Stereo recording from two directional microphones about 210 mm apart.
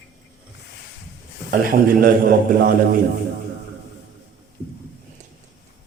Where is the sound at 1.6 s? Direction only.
45° right (ahead or behind).